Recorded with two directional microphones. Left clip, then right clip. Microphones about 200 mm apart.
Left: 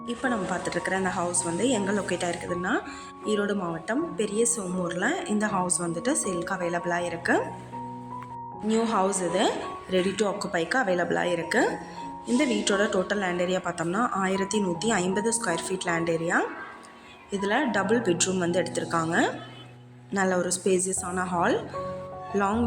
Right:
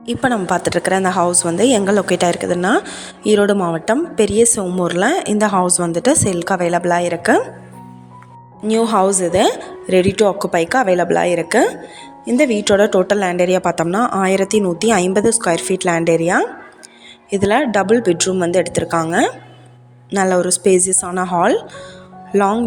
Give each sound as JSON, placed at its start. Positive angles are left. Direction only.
{"t": 0.0, "sound": "a woman's voice", "side_deg": -50}
{"t": 8.6, "sound": "a woman's voice", "side_deg": -45}